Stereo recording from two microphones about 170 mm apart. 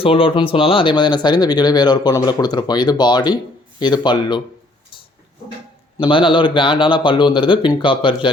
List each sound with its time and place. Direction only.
0.0 s speech: 30° left (ahead or behind)
6.0 s speech: 30° left (ahead or behind)